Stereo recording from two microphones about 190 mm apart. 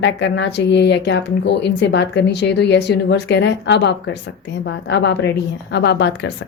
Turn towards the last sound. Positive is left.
turn(degrees=60)  # may be behind; listen again after turning